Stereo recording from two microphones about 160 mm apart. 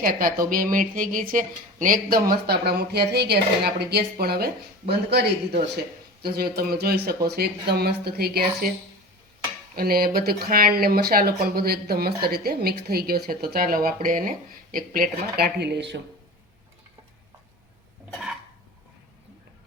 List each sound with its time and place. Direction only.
0.0 s speech: 65° right (ahead or behind); by 5.5 s 90° right
6.2 s speech: 75° right (ahead or behind)
9.7 s speech: 70° right (ahead or behind); by 16.0 s 90° right
18.1 s a sound: 5° right (ahead or behind)